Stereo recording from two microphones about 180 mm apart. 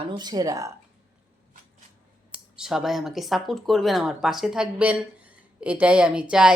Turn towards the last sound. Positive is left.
turn(degrees=-5)  # may be behind; listen again after turning